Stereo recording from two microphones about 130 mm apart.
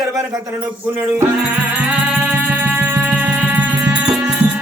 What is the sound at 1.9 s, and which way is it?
Music, 10° right (ahead or behind).